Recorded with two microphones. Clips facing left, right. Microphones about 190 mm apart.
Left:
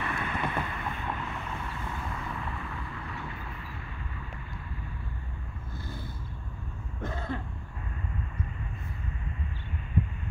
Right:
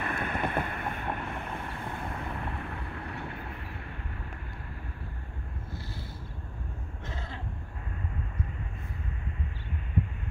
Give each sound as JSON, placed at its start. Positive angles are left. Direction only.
{"t": 0.0, "sound": "vehicle", "side_deg": -55}
{"t": 7.0, "sound": "throat clearing", "side_deg": 55}